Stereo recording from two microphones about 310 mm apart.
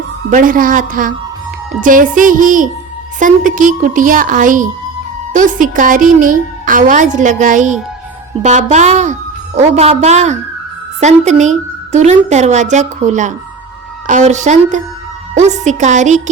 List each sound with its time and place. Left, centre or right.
0.3 s a woman's voice: right